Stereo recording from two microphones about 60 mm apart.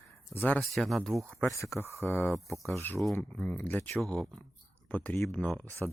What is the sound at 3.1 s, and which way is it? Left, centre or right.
Speech, centre.